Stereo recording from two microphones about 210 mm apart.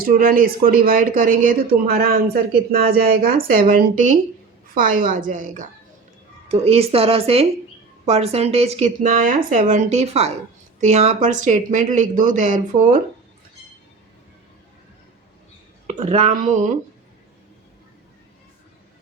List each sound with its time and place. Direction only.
0.0 s speech: 45° right (ahead or behind)
16.0 s speech: 30° right (ahead or behind)